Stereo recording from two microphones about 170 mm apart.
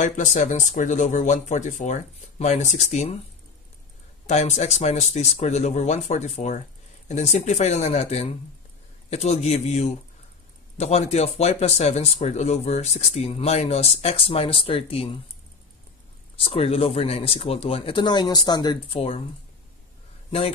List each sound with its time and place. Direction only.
0.0 s speech: 45° left (ahead or behind)
4.3 s speech: 40° left (ahead or behind)
16.3 s speech: 35° left (ahead or behind)
20.2 s a man's voice: 35° left (ahead or behind)